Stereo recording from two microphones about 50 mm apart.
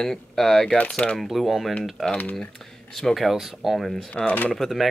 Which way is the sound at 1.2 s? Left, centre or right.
Centre.